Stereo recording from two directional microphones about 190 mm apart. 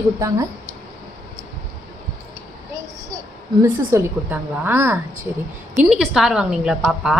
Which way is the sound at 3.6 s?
15° right (ahead or behind).